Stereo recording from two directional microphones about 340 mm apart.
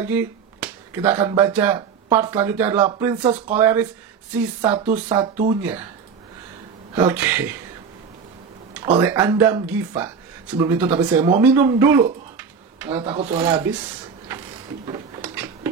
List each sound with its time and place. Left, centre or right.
0.0 s speech: centre
7.0 s speech: centre
9.0 s speech: centre
12.4 s a sound: centre
13.0 s speech: centre
14.9 s a sound: centre